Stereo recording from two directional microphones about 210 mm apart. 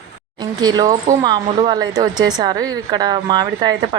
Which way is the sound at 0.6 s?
20° right (ahead or behind).